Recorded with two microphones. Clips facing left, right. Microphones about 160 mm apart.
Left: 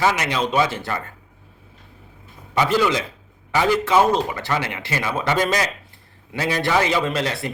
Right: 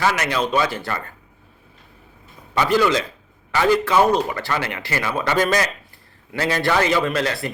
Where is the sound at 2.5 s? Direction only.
20° left (ahead or behind).